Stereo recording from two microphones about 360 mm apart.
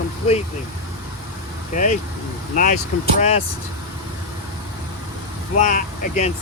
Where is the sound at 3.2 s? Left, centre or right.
Centre.